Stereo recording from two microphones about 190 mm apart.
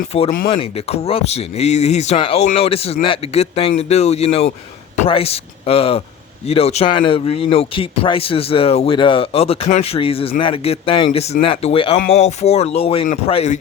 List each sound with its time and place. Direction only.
0.1 s speech: 30° left (ahead or behind)